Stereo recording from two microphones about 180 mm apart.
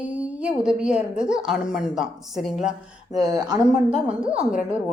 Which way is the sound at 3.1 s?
20° right (ahead or behind).